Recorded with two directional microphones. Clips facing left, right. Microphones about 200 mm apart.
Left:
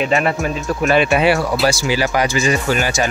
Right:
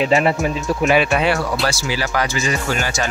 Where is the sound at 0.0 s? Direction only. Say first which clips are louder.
Right 1 dB; 25° right (ahead or behind).